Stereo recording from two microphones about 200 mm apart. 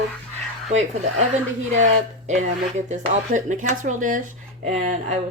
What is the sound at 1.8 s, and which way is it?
Speech, 35° right (ahead or behind).